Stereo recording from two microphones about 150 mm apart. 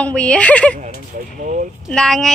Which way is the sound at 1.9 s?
5° left (ahead or behind).